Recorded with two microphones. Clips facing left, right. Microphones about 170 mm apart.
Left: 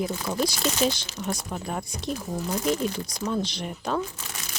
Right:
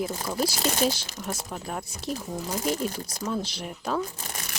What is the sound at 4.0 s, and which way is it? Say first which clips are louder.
Speech: even; 40° right (ahead or behind).